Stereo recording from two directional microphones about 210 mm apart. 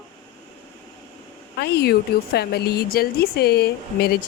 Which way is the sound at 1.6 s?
50° left (ahead or behind).